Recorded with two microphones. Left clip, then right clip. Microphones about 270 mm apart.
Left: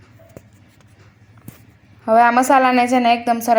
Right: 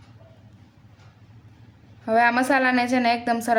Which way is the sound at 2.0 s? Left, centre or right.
Centre.